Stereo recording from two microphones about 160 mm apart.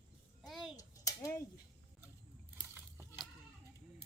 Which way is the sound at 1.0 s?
20° left (ahead or behind).